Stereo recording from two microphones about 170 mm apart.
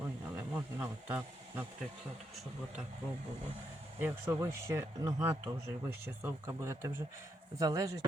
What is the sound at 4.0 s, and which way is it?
Speech, 15° right (ahead or behind).